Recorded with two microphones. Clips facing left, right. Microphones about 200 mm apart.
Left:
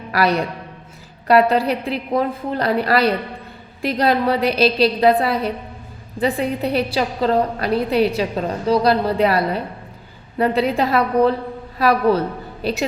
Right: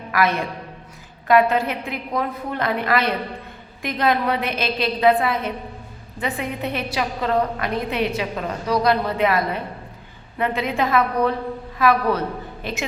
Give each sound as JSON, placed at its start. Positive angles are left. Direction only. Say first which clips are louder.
{"t": 0.1, "sound": "a woman's voice", "louder": "left 3 dB", "side_deg": 35}